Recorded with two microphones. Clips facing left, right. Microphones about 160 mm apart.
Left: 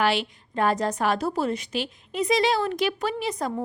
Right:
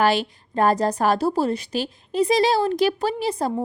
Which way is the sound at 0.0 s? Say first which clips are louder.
Right 4 dB; 40° right (ahead or behind).